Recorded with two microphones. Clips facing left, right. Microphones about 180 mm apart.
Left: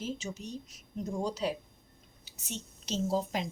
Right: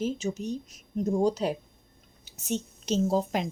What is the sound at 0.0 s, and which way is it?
A woman's voice, 45° right (ahead or behind).